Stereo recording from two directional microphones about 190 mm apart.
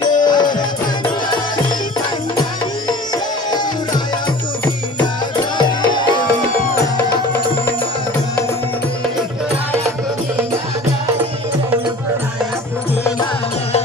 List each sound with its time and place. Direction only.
0.1 s music: 20° left (ahead or behind)
3.4 s music: 20° left (ahead or behind)
5.0 s music: 25° left (ahead or behind)